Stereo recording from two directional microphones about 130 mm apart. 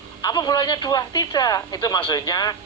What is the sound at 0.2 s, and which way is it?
Speech, 30° left (ahead or behind).